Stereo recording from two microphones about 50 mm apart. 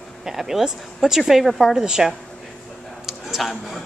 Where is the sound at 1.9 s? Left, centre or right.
Centre.